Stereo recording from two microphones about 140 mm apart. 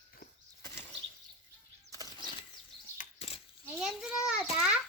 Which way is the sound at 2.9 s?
50° left (ahead or behind).